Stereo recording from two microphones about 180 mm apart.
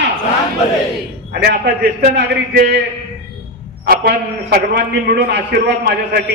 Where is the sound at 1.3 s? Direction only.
60° right (ahead or behind).